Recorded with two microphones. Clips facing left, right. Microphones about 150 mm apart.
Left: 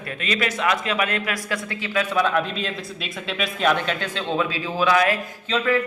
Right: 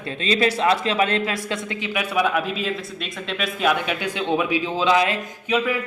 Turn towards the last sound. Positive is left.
turn(degrees=-10)  # may be behind; listen again after turning